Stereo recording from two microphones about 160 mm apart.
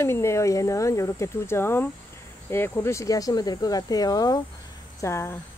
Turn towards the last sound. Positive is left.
turn(degrees=15)  # may be behind; listen again after turning